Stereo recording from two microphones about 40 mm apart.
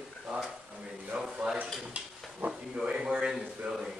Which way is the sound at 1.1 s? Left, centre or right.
Right.